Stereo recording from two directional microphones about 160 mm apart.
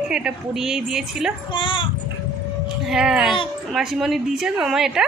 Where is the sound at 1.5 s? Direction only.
30° left (ahead or behind).